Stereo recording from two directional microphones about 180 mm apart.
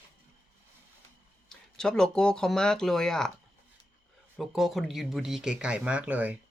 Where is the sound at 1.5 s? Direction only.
5° left (ahead or behind).